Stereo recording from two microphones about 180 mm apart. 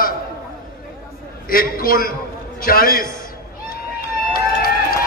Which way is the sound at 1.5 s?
55° left (ahead or behind).